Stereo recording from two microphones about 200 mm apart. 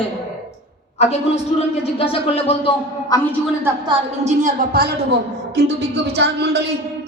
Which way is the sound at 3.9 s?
35° right (ahead or behind).